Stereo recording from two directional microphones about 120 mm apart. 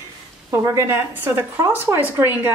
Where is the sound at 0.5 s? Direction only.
25° right (ahead or behind).